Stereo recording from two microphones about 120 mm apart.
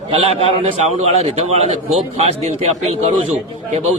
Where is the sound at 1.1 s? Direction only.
65° right (ahead or behind).